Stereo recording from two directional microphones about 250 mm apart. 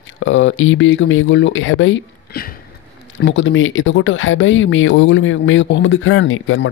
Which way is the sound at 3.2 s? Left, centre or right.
Left.